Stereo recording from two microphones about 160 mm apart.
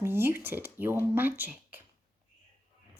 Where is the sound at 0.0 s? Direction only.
15° right (ahead or behind).